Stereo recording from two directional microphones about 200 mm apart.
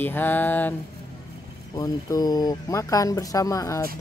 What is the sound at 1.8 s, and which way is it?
Speech, 20° left (ahead or behind).